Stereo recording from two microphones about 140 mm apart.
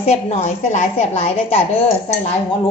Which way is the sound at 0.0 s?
50° left (ahead or behind).